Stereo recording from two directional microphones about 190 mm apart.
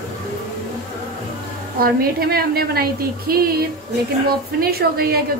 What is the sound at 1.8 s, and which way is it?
A woman's voice, 55° right (ahead or behind).